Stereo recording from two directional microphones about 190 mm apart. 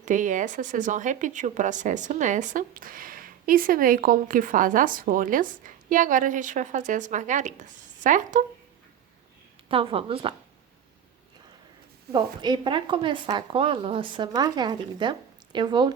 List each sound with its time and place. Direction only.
0.0 s speech: 40° right (ahead or behind)
9.6 s speech: 30° right (ahead or behind)
12.1 s speech: 25° right (ahead or behind)